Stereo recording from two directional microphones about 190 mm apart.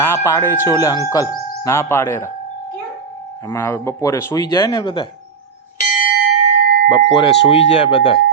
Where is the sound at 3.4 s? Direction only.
15° left (ahead or behind).